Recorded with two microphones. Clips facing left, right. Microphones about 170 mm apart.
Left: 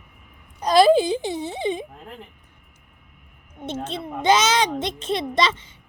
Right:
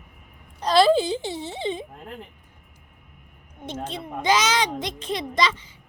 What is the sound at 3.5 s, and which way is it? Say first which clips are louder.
A woman's voice: left 3 dB; 25° left (ahead or behind).